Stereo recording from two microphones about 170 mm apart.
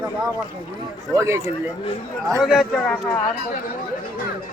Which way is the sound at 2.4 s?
Centre (ahead or behind).